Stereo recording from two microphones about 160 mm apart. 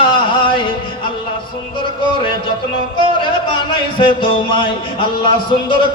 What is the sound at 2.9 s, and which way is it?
Music, 30° left (ahead or behind).